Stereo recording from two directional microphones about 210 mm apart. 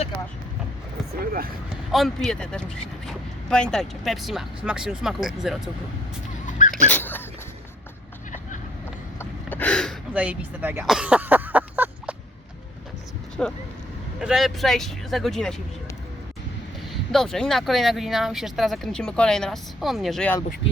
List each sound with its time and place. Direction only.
1.2 s speech: 45° right (ahead or behind)
1.7 s speech: centre (ahead or behind)
6.4 s dog: 35° left (ahead or behind)
6.8 s dog: 10° left (ahead or behind)
9.1 s a sound: 10° left (ahead or behind); by 12.1 s 10° right (ahead or behind)
13.4 s speech: 5° left (ahead or behind)
16.9 s speech: centre (ahead or behind)